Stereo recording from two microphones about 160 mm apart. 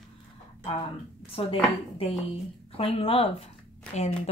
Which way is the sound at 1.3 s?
35° left (ahead or behind).